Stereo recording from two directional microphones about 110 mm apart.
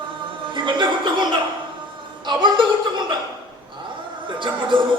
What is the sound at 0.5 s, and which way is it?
Speech, 45° right (ahead or behind).